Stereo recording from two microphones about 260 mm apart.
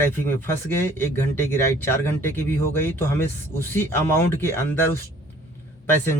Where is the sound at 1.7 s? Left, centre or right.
Centre.